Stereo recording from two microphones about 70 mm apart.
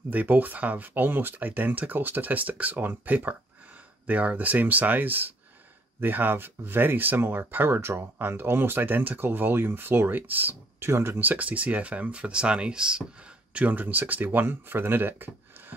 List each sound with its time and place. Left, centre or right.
0.1 s speech: right
10.9 s speech: right